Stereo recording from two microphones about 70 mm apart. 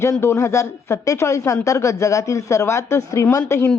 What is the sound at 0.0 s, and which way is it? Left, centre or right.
Speech, left.